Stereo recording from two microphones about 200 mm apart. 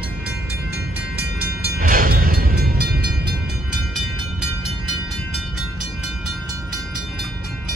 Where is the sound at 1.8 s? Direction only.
45° right (ahead or behind).